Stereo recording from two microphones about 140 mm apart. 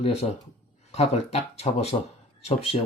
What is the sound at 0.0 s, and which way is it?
Speech, 50° left (ahead or behind).